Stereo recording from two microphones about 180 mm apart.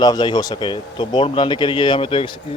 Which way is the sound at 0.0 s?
25° left (ahead or behind).